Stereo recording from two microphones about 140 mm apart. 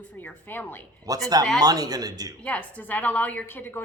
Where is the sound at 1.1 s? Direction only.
25° right (ahead or behind).